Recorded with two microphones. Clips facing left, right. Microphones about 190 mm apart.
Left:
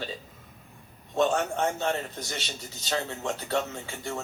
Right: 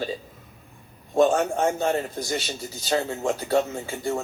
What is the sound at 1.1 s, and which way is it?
A man's voice, 45° right (ahead or behind).